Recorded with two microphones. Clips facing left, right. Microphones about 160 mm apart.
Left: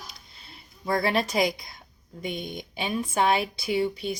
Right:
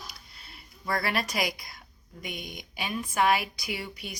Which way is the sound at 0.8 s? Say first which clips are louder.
Left 5 dB; 25° left (ahead or behind).